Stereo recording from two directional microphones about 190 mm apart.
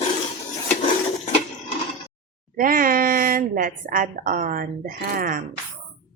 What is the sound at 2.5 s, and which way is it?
A woman's voice, 45° right (ahead or behind).